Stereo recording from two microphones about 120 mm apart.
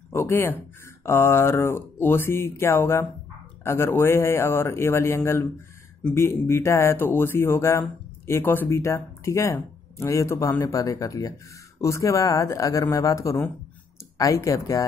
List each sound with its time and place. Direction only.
0.1 s speech: 20° left (ahead or behind)